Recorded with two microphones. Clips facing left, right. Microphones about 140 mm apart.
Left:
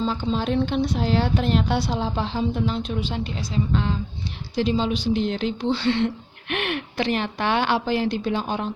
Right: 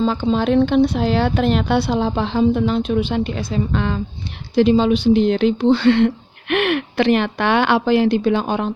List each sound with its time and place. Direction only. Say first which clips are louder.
0.0 s speech: right 6 dB; 65° right (ahead or behind)